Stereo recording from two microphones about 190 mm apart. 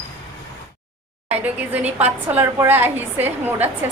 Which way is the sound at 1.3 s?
10° right (ahead or behind).